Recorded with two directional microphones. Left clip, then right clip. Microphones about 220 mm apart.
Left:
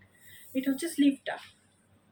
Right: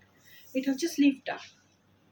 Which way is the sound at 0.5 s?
10° right (ahead or behind).